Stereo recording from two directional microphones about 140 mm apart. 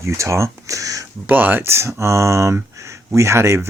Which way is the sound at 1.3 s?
15° right (ahead or behind).